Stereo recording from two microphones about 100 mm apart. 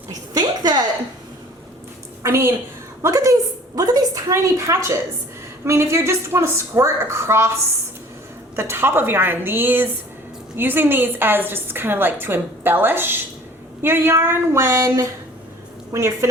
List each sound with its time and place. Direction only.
0.1 s a sound: 40° right (ahead or behind)
2.2 s a woman's voice: 30° right (ahead or behind)
8.5 s a woman's voice: 25° right (ahead or behind)